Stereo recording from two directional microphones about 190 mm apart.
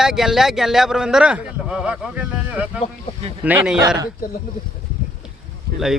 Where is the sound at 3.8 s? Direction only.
20° right (ahead or behind).